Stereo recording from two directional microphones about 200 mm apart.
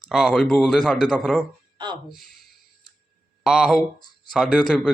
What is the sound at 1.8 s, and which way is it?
Speech, 20° right (ahead or behind).